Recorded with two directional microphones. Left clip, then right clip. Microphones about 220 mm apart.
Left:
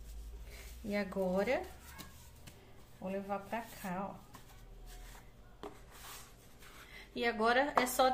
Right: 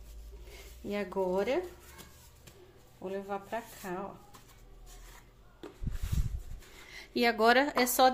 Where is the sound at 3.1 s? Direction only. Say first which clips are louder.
Right 2 dB; 35° right (ahead or behind).